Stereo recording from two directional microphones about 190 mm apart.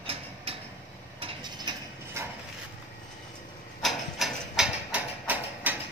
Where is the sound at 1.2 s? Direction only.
25° right (ahead or behind).